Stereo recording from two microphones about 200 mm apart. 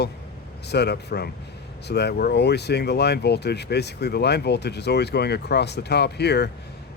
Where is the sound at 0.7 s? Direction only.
55° left (ahead or behind).